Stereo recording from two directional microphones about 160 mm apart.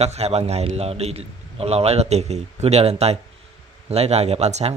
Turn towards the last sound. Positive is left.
turn(degrees=-40)  # may be behind; listen again after turning